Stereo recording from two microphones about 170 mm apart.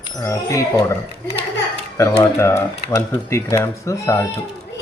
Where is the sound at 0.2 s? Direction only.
15° left (ahead or behind).